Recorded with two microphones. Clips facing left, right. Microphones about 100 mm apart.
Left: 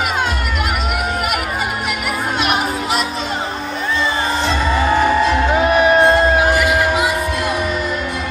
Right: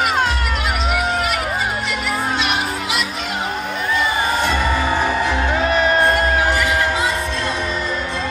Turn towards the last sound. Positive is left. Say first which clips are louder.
# left 3 dB
turn(degrees=15)  # may be behind; listen again after turning